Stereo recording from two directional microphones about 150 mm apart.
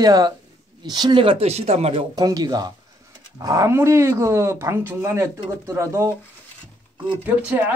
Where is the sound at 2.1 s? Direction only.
25° right (ahead or behind).